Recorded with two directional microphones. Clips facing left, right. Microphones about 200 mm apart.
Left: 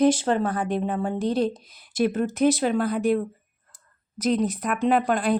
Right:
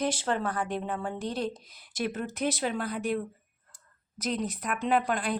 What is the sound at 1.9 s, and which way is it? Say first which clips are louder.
Speech: left 9 dB; 35° left (ahead or behind).